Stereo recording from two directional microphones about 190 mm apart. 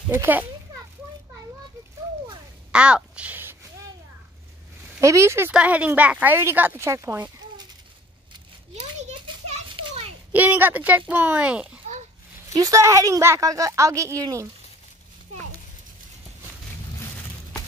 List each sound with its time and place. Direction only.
0.2 s speech: 10° right (ahead or behind)
2.7 s speech: 5° right (ahead or behind)
5.0 s speech: 15° right (ahead or behind)
9.0 s children playing: 35° right (ahead or behind)
10.3 s speech: 10° right (ahead or behind)
12.4 s speech: 20° right (ahead or behind)